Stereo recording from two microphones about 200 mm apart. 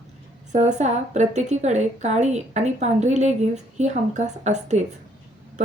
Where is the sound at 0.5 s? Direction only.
35° right (ahead or behind).